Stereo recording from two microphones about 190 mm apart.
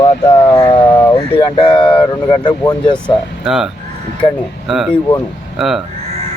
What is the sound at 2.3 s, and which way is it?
Speech, 25° left (ahead or behind).